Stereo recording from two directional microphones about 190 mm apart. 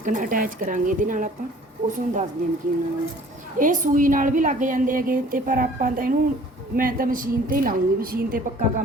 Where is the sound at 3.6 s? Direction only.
45° right (ahead or behind).